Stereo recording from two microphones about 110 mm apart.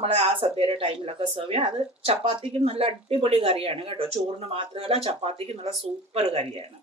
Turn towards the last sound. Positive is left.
turn(degrees=-65)  # may be behind; listen again after turning